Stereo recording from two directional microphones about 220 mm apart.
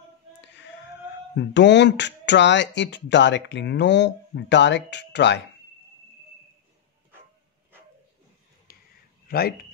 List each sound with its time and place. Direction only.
1.3 s speech: 50° left (ahead or behind)
8.7 s a sound: 40° left (ahead or behind)
9.3 s speech: 45° left (ahead or behind)